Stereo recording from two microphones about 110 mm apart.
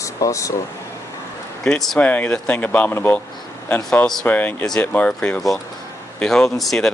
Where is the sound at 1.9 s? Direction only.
15° left (ahead or behind).